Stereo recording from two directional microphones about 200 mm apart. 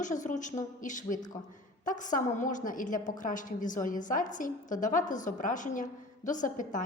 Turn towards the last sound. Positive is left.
turn(degrees=40)  # may be behind; listen again after turning